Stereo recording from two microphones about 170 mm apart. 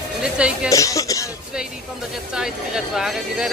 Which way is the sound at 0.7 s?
20° left (ahead or behind).